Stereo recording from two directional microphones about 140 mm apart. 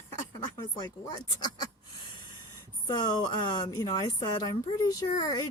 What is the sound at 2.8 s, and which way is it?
Speech, 30° left (ahead or behind).